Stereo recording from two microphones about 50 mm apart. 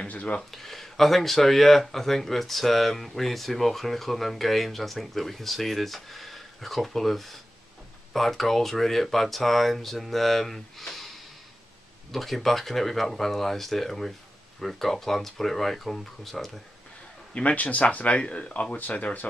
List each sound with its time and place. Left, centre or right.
0.0 s speech: left
0.5 s speech: centre
12.1 s speech: centre
17.3 s speech: left